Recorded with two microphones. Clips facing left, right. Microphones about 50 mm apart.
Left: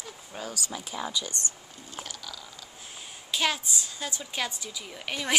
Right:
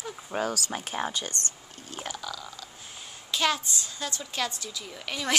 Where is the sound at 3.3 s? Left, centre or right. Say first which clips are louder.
Right 1 dB; centre.